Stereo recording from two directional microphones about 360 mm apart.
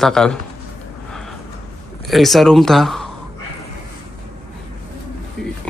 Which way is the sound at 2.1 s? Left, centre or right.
Centre.